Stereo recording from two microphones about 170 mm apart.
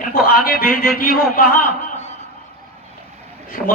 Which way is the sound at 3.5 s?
55° left (ahead or behind).